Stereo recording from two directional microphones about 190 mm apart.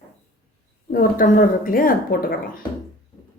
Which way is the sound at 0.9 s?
50° left (ahead or behind).